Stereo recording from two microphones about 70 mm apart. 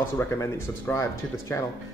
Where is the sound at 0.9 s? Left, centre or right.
Left.